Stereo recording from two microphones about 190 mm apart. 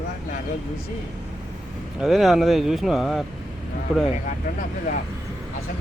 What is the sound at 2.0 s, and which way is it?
Speech, centre (ahead or behind).